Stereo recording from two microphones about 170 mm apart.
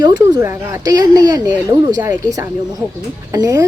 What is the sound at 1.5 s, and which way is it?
Speech, 10° right (ahead or behind).